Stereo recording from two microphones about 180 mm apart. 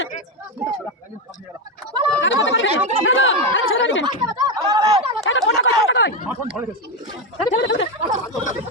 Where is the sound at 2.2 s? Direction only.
90° left.